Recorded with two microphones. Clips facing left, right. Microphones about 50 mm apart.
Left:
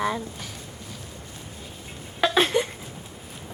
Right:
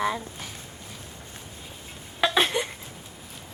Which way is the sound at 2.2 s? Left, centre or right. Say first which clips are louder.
Left 2 dB; centre.